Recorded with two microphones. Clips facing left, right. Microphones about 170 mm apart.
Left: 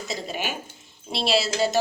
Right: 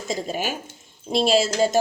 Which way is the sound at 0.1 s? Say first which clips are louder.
Right 5 dB; 45° right (ahead or behind).